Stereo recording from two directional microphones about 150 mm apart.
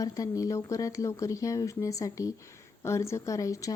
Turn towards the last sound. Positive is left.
turn(degrees=20)  # may be behind; listen again after turning